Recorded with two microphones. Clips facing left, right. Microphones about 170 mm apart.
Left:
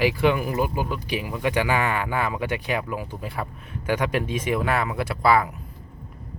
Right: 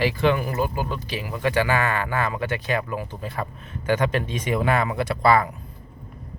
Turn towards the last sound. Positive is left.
turn(degrees=5)  # may be behind; listen again after turning